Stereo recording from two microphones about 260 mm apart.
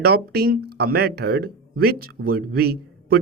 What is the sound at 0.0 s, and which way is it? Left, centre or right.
Speech, right.